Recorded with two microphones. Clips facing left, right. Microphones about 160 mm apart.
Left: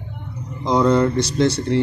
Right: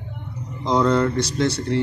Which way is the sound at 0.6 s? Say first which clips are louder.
Left 2 dB; 15° left (ahead or behind).